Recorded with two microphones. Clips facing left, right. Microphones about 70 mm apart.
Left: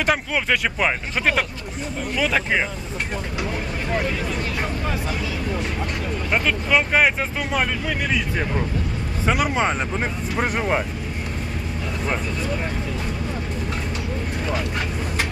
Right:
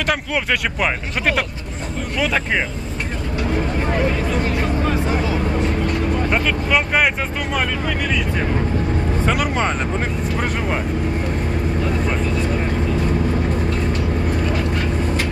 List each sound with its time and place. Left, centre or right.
0.0 s speech: centre
5.0 s speech: right
6.3 s speech: centre
9.2 s speech: centre